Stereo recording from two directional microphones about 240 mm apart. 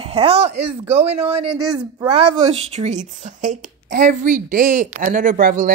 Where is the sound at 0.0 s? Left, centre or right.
Right.